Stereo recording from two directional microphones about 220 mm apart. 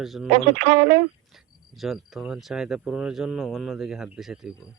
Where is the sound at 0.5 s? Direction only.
30° right (ahead or behind).